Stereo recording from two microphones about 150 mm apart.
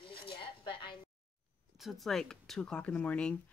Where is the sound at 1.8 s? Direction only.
Centre (ahead or behind).